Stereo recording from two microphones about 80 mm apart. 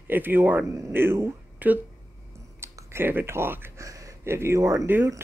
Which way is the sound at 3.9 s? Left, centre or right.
Right.